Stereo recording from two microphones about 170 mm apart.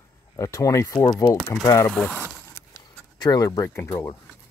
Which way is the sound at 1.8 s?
5° left (ahead or behind).